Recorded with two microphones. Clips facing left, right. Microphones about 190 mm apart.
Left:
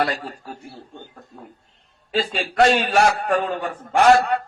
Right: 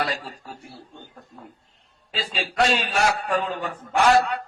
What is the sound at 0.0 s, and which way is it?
Speech, 50° left (ahead or behind).